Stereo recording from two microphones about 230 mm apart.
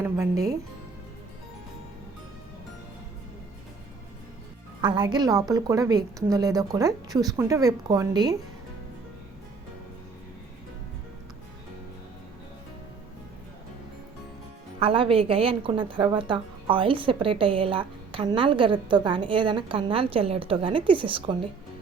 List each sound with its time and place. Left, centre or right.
0.0 s speech: centre
4.8 s speech: centre
14.8 s a woman's voice: right